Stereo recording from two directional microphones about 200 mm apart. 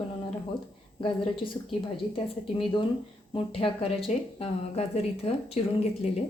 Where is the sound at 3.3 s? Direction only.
25° left (ahead or behind).